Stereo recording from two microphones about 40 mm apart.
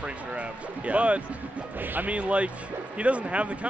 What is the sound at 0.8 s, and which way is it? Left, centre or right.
Speech, right.